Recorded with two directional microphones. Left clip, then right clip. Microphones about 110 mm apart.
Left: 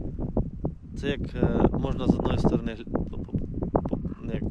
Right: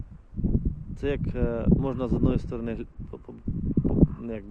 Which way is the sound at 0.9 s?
25° left (ahead or behind).